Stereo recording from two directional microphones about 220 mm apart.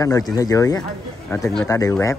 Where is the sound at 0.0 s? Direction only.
15° left (ahead or behind).